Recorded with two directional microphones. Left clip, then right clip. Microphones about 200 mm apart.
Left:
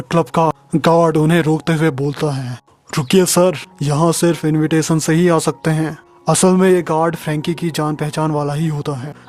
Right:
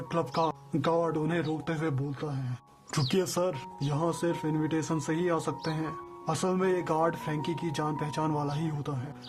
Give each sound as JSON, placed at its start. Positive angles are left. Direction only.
{"t": 0.1, "sound": "speech", "side_deg": 40}